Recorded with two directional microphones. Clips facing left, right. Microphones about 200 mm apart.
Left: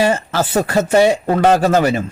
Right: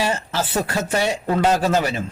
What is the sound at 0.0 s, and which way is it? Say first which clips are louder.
A man's voice: left 7 dB; 55° left (ahead or behind).